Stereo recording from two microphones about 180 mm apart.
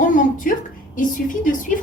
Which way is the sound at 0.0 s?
45° left (ahead or behind).